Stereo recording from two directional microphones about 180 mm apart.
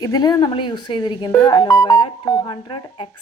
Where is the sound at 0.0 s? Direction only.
20° left (ahead or behind).